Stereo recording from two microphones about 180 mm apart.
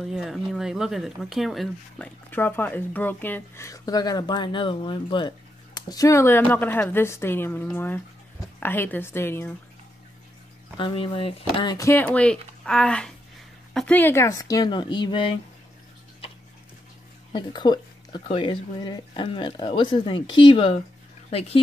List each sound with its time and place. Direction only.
0.0 s speech: centre (ahead or behind)
2.3 s speech: 10° left (ahead or behind)
10.8 s speech: 30° left (ahead or behind)
17.3 s speech: 25° left (ahead or behind)